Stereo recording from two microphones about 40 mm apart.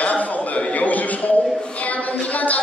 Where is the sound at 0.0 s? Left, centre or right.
Left.